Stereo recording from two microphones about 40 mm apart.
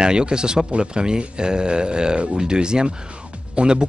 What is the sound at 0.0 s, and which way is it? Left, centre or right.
Speech, right.